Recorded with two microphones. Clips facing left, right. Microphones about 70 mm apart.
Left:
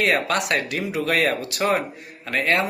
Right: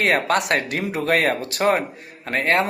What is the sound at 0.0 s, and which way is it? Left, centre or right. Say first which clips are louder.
Speech: right 2 dB; right.